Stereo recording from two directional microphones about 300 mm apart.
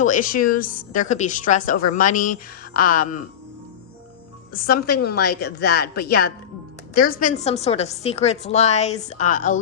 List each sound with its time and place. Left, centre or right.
0.0 s a woman's voice: left
4.5 s a woman's voice: left